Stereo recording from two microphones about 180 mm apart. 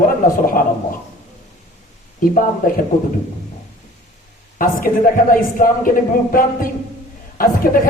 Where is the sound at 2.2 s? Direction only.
50° left (ahead or behind).